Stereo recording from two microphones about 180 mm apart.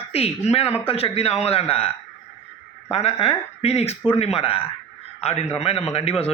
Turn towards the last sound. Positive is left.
turn(degrees=35)  # may be behind; listen again after turning